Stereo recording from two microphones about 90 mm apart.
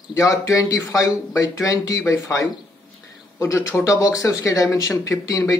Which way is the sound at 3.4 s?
30° left (ahead or behind).